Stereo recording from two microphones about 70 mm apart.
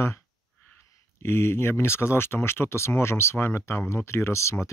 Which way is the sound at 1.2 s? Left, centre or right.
Left.